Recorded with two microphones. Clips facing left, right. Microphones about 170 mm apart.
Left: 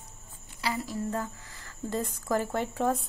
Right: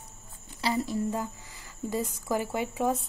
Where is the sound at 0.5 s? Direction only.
25° right (ahead or behind).